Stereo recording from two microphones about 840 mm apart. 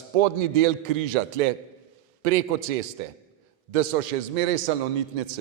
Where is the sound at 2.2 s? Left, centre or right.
Right.